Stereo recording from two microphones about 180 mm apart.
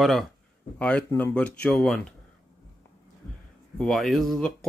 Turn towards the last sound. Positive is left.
turn(degrees=0)  # may be behind; listen again after turning